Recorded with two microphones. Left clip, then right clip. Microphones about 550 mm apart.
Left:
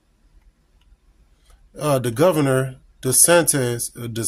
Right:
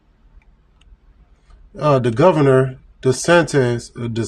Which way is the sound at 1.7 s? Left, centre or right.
Left.